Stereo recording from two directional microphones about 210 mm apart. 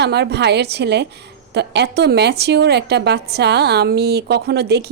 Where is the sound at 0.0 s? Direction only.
55° right (ahead or behind).